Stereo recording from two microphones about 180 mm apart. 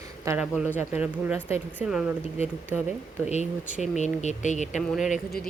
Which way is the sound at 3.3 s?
40° left (ahead or behind).